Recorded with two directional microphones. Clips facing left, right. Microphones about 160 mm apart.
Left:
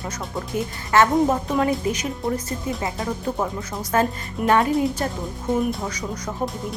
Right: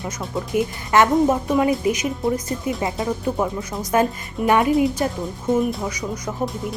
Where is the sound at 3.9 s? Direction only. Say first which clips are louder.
Right 2 dB; 15° right (ahead or behind).